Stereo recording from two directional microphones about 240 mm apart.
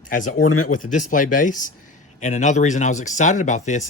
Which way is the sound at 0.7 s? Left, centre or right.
Left.